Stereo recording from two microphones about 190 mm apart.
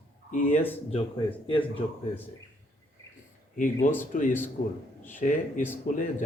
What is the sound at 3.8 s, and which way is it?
Speech, 45° left (ahead or behind).